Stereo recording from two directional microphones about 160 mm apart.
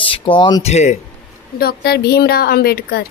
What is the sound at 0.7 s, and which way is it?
Speech, 45° left (ahead or behind).